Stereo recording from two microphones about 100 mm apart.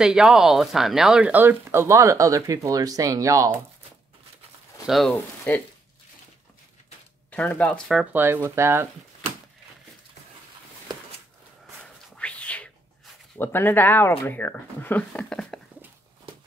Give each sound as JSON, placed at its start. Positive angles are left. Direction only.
{"t": 0.0, "sound": "speech", "side_deg": -5}
{"t": 4.8, "sound": "speech", "side_deg": 0}
{"t": 5.1, "sound": "speech", "side_deg": 20}
{"t": 7.2, "sound": "speech", "side_deg": 15}
{"t": 8.1, "sound": "speech", "side_deg": -20}
{"t": 11.8, "sound": "a sound", "side_deg": 10}
{"t": 13.4, "sound": "speech", "side_deg": 20}